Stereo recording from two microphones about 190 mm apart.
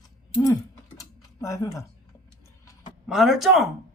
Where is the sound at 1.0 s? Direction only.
15° left (ahead or behind).